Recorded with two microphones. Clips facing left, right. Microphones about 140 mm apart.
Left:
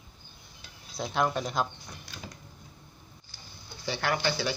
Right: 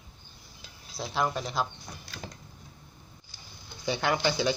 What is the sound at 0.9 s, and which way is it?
Speech, centre (ahead or behind).